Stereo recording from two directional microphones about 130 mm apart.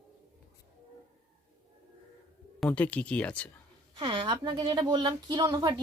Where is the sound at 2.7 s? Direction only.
10° left (ahead or behind).